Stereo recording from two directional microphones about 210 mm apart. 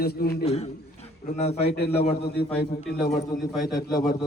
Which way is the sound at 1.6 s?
50° left (ahead or behind).